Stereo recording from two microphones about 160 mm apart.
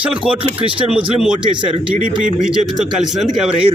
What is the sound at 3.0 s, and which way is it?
Speech, centre (ahead or behind).